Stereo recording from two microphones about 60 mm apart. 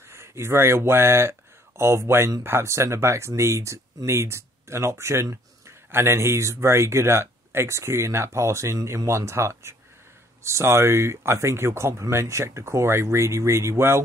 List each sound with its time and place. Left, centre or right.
0.1 s speech: right